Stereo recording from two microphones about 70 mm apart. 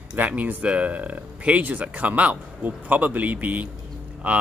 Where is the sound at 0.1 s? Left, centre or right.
Right.